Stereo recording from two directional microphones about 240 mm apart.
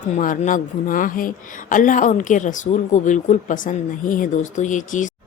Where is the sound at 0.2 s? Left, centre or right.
Left.